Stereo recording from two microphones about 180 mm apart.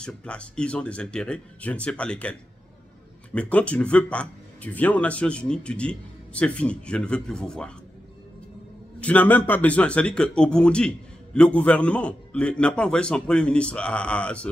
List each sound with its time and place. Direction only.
0.0 s speech: 5° left (ahead or behind)
3.3 s speech: 5° left (ahead or behind)
9.0 s speech: 10° left (ahead or behind)